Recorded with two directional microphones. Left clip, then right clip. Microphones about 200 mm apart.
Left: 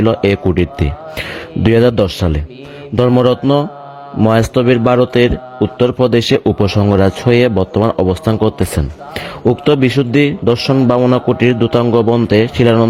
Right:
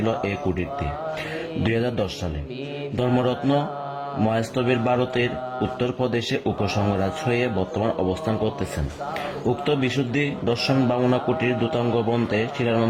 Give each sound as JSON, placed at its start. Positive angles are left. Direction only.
{"t": 0.0, "sound": "a man's voice", "side_deg": 45}
{"t": 9.6, "sound": "a man's voice", "side_deg": 45}